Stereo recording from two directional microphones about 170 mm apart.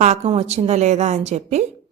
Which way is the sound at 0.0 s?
40° right (ahead or behind).